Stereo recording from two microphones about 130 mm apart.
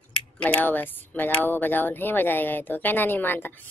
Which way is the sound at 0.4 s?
10° left (ahead or behind).